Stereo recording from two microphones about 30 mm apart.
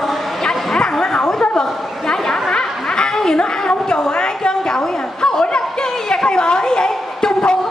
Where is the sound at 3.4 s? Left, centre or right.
Left.